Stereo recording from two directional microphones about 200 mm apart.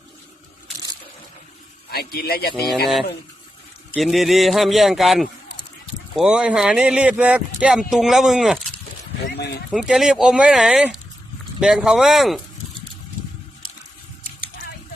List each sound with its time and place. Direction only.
1.9 s a man's voice: 50° left (ahead or behind)
3.9 s speech: centre (ahead or behind)
9.3 s speech: 55° left (ahead or behind)
9.7 s speech: centre (ahead or behind)